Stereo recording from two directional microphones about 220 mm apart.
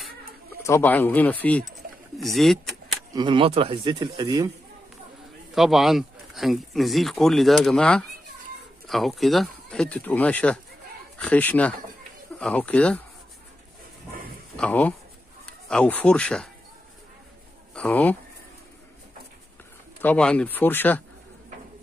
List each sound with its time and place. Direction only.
0.6 s speech: 10° left (ahead or behind)
3.1 s speech: 20° right (ahead or behind)
5.5 s a man's voice: centre (ahead or behind)
14.6 s a man's voice: 5° left (ahead or behind)
17.7 s speech: 5° left (ahead or behind)
20.0 s speech: 5° left (ahead or behind)